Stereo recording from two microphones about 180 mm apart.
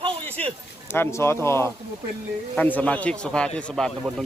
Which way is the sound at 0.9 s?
15° left (ahead or behind).